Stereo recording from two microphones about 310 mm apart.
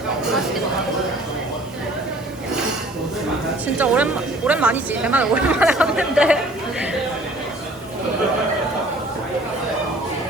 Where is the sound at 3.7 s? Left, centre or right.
Centre.